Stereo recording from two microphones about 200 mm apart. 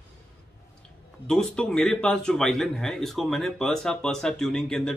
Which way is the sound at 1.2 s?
5° left (ahead or behind).